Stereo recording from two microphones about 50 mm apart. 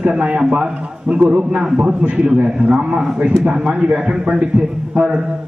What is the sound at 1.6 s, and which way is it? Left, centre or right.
Speech, centre.